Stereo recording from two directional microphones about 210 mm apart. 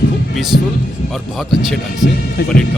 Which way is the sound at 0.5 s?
50° left (ahead or behind).